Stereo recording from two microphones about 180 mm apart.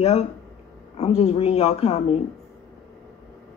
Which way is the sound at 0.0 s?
35° left (ahead or behind).